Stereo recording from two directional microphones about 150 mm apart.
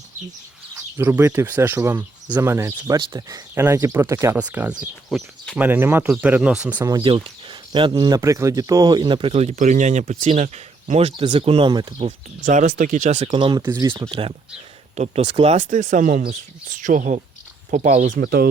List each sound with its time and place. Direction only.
0.7 s speech: 15° right (ahead or behind)
5.0 s speech: 5° left (ahead or behind)
5.5 s speech: 15° right (ahead or behind)
6.7 s speech: 25° right (ahead or behind)
7.0 s speech: 35° right (ahead or behind)
12.4 s speech: 60° right (ahead or behind)
18.2 s speech: 80° right